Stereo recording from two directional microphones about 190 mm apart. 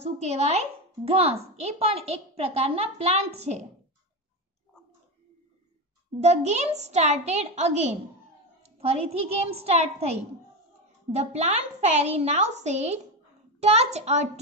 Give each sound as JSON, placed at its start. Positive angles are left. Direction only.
{"t": 0.0, "sound": "a woman's voice", "side_deg": -35}
{"t": 6.2, "sound": "a woman's voice", "side_deg": -35}